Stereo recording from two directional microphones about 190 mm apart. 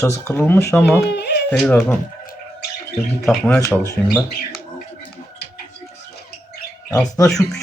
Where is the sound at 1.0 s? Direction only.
60° left (ahead or behind).